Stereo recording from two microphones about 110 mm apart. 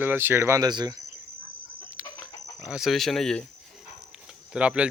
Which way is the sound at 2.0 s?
10° right (ahead or behind).